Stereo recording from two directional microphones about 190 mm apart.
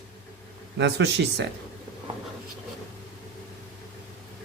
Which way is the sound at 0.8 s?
65° right (ahead or behind).